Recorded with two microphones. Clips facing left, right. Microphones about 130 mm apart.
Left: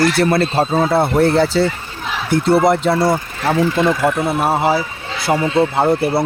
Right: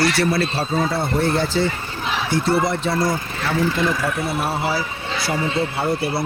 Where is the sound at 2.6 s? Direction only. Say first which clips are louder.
Left 7 dB; 65° left (ahead or behind).